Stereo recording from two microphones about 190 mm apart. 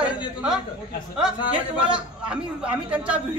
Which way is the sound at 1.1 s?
5° right (ahead or behind).